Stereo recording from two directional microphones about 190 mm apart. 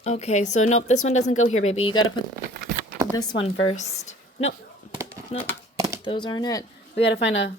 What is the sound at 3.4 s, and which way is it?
Speech, 35° left (ahead or behind).